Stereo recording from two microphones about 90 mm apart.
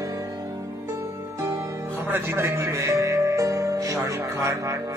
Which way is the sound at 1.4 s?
35° right (ahead or behind).